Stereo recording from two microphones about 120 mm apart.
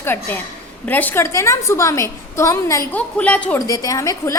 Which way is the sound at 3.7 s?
30° left (ahead or behind).